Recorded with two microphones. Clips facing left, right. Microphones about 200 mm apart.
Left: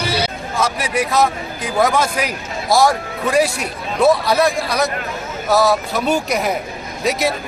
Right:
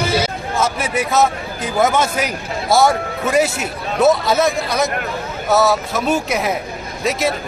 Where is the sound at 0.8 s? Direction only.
5° right (ahead or behind).